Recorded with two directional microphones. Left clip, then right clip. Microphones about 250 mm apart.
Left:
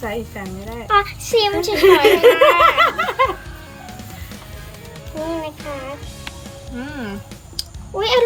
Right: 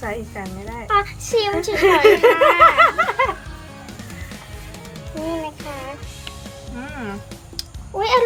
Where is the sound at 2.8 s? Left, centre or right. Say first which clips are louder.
Even; right.